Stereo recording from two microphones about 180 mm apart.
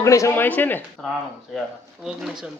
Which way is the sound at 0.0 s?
15° left (ahead or behind).